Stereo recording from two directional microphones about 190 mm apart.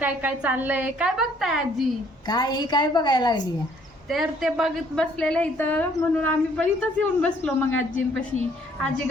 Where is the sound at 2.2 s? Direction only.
20° left (ahead or behind).